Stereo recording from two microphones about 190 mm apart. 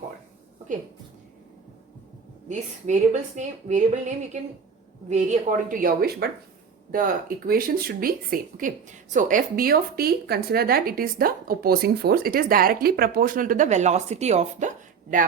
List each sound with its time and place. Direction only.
2.5 s a woman's voice: 40° right (ahead or behind)